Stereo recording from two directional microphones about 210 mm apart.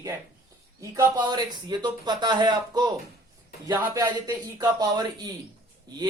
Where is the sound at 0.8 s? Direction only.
15° right (ahead or behind).